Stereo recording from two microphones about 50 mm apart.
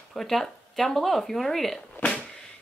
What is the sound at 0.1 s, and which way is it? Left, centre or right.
Speech, centre.